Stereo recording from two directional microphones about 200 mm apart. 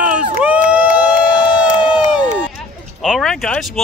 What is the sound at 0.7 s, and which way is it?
Run, 5° right (ahead or behind).